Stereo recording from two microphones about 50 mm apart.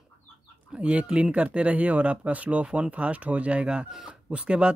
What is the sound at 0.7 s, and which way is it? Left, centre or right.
Speech, right.